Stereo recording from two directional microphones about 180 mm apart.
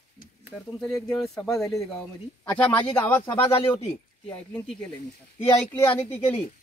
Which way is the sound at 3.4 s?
30° left (ahead or behind).